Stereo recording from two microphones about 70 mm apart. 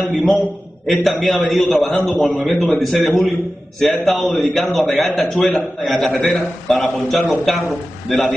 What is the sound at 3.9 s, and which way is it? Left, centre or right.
A man's voice, centre.